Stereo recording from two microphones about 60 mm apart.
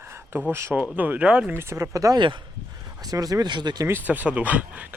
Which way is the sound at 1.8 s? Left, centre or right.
Right.